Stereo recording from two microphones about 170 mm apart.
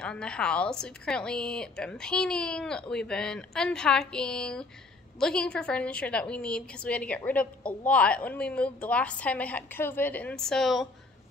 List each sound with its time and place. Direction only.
0.0 s a woman's voice: 5° left (ahead or behind)